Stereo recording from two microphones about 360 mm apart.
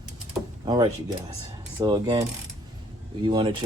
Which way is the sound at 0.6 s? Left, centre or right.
Centre.